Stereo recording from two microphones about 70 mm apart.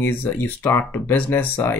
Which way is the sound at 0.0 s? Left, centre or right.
Left.